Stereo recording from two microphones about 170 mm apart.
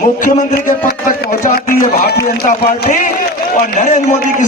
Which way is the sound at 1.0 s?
55° left (ahead or behind).